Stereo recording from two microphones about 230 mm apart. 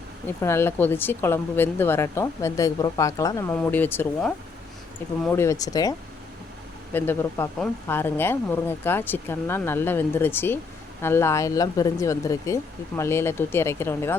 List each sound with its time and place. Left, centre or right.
0.4 s a woman's voice: centre
6.9 s a woman's voice: centre